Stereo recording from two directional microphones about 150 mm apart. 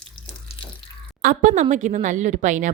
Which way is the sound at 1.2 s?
60° right (ahead or behind).